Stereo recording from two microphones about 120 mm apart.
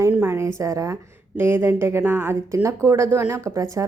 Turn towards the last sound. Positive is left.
turn(degrees=-25)  # may be behind; listen again after turning